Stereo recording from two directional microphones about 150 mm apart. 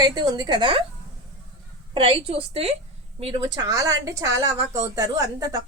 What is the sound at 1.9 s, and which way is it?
A woman's voice, 40° right (ahead or behind).